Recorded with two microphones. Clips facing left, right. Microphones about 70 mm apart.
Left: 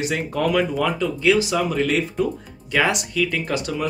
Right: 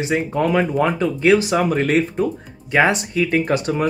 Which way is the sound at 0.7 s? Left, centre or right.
Right.